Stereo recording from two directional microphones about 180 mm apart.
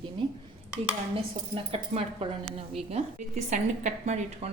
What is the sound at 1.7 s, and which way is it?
Speech, 35° right (ahead or behind).